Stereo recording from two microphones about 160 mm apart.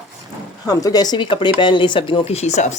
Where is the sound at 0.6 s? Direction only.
25° left (ahead or behind).